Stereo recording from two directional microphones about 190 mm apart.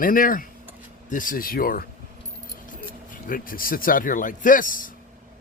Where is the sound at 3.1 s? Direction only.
45° left (ahead or behind).